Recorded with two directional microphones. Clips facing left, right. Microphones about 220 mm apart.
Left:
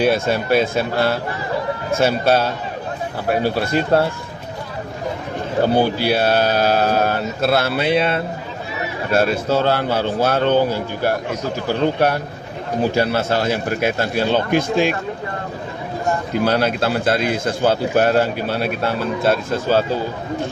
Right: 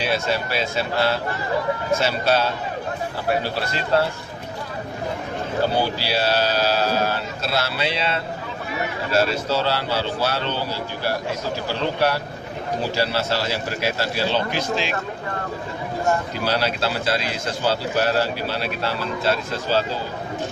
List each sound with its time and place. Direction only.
0.0 s a man's voice: 50° left (ahead or behind)
3.7 s a man's voice: 55° left (ahead or behind)
5.7 s a man's voice: 55° left (ahead or behind)
16.4 s a man's voice: 55° left (ahead or behind)